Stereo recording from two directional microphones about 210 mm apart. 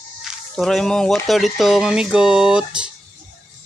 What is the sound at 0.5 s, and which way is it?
Speech, centre (ahead or behind).